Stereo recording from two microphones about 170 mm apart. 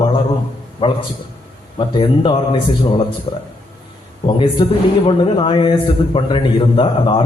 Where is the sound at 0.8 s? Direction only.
30° left (ahead or behind).